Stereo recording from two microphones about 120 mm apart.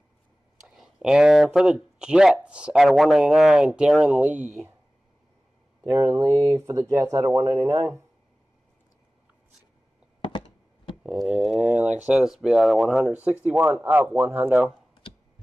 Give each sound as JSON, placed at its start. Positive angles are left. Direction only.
{"t": 0.7, "sound": "speech", "side_deg": -5}
{"t": 5.9, "sound": "speech", "side_deg": -25}
{"t": 11.0, "sound": "speech", "side_deg": -5}